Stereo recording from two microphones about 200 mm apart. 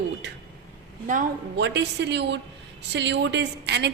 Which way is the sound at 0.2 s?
60° right (ahead or behind).